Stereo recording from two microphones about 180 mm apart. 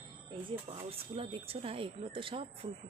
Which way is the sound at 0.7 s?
30° right (ahead or behind).